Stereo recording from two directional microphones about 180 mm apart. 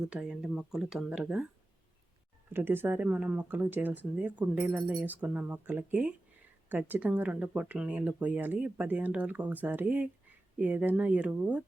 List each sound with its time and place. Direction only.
0.1 s speech: 5° right (ahead or behind)
2.5 s speech: 10° right (ahead or behind)